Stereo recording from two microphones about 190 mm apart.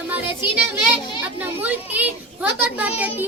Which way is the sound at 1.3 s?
10° right (ahead or behind).